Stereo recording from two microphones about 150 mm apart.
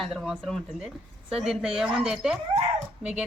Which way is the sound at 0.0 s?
Centre (ahead or behind).